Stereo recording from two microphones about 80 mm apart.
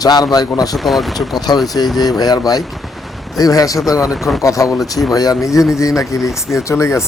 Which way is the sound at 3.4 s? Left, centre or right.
Left.